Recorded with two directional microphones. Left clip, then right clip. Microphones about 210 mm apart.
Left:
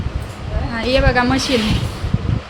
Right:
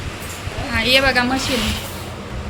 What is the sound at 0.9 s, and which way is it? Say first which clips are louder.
Speech: even; 35° left (ahead or behind).